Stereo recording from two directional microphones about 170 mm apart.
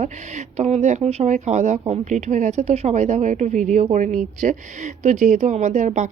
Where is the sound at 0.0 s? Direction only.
40° right (ahead or behind).